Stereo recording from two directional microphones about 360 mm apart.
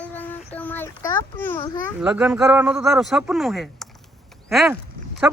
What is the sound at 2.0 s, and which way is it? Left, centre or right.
Speech, centre.